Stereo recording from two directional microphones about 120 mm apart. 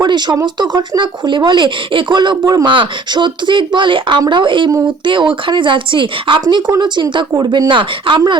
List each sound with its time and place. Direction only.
0.0 s a sound: 35° right (ahead or behind)
0.4 s speech: 35° right (ahead or behind)
6.4 s speech: 35° right (ahead or behind)